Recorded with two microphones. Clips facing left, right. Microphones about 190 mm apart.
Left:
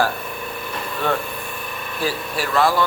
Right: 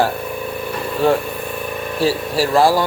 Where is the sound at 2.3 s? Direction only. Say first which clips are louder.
Right 5 dB; 35° right (ahead or behind).